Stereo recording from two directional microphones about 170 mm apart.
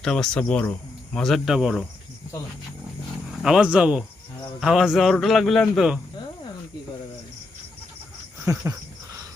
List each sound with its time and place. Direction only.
0.0 s speech: 5° left (ahead or behind)
3.4 s speech: 5° right (ahead or behind)
8.4 s a sound: 15° right (ahead or behind)